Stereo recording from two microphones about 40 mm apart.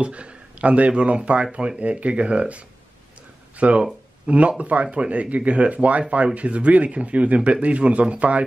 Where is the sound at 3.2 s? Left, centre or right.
Right.